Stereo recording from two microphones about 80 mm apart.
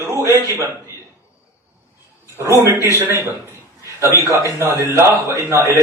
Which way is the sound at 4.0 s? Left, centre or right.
Right.